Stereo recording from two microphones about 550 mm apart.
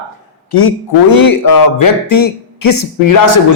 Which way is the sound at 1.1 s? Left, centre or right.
Left.